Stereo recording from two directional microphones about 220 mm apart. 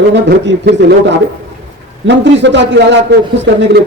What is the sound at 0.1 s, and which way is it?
Speech, 50° right (ahead or behind).